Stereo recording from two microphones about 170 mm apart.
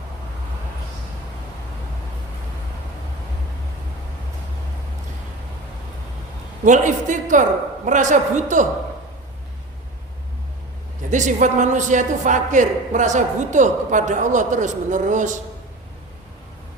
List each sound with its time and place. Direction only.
6.7 s a man's voice: 45° right (ahead or behind)
11.1 s a man's voice: 45° right (ahead or behind)